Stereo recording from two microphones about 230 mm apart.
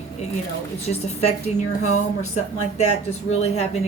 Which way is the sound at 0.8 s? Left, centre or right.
Left.